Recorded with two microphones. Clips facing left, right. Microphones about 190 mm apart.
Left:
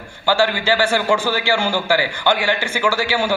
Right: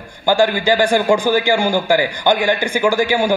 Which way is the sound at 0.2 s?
15° right (ahead or behind).